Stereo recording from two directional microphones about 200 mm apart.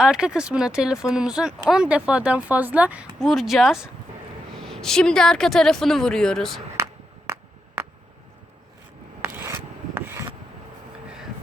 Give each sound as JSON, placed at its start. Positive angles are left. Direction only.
{"t": 0.0, "sound": "speech", "side_deg": -5}
{"t": 6.8, "sound": "a sound", "side_deg": -15}
{"t": 9.2, "sound": "filing", "side_deg": -10}